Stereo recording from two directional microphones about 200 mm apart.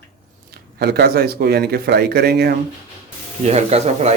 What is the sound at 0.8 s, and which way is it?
Speech, 55° right (ahead or behind).